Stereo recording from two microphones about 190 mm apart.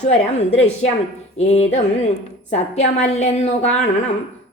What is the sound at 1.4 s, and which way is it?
Speech, 35° left (ahead or behind).